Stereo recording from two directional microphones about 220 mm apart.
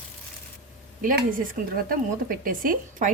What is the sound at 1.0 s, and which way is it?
A woman's voice, 40° right (ahead or behind).